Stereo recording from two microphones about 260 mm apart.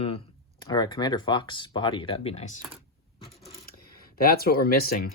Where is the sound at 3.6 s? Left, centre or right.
Left.